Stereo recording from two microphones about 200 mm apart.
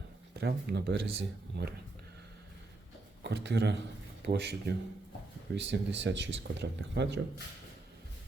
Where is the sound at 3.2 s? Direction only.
60° right (ahead or behind).